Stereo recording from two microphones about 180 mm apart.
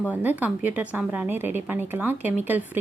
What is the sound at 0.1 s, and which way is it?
Speech, 10° right (ahead or behind).